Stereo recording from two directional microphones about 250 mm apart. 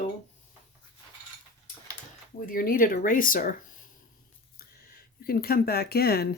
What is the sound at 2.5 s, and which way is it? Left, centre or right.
Speech, left.